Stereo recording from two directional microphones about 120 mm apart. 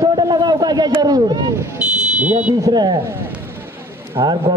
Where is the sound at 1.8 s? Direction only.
10° right (ahead or behind).